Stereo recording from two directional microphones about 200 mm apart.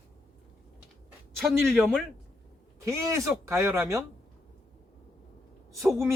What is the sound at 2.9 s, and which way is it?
Speech, 15° right (ahead or behind).